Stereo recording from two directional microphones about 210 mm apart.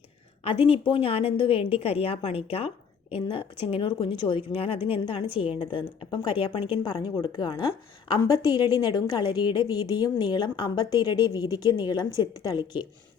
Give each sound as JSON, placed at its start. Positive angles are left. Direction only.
{"t": 0.4, "sound": "a woman's voice", "side_deg": 25}